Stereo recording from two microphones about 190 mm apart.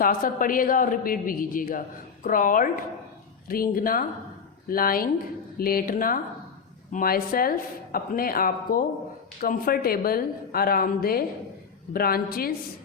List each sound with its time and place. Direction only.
0.0 s a woman's voice: 45° left (ahead or behind)